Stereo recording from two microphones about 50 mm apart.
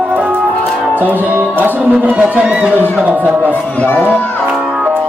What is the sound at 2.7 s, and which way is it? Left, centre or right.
Speech, left.